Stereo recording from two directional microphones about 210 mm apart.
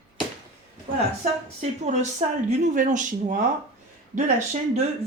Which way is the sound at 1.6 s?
35° right (ahead or behind).